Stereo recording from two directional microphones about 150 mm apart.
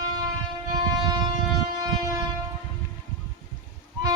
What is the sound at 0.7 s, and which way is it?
Train, 30° right (ahead or behind).